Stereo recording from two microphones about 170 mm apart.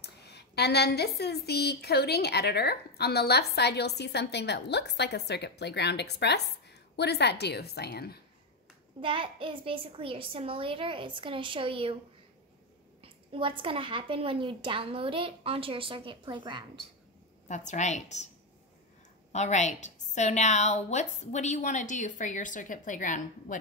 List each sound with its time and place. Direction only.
0.0 s a woman's voice: 75° left (ahead or behind)
9.0 s a woman's voice: 30° right (ahead or behind)
13.0 s a woman's voice: 30° right (ahead or behind)
17.5 s a woman's voice: 45° left (ahead or behind)
19.3 s a woman's voice: 45° left (ahead or behind)